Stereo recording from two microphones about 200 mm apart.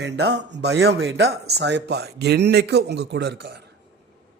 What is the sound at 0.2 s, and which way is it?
Speech, 60° right (ahead or behind).